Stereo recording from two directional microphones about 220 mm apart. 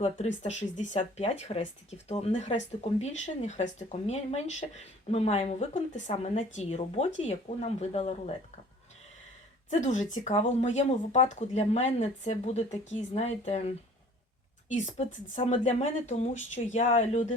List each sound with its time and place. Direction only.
0.4 s speech: 30° left (ahead or behind)
9.6 s speech: 35° left (ahead or behind)
14.9 s speech: 30° left (ahead or behind)